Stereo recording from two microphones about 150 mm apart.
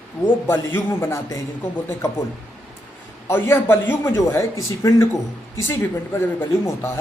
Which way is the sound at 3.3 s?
15° left (ahead or behind).